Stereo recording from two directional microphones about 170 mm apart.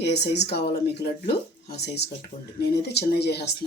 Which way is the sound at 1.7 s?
75° left (ahead or behind).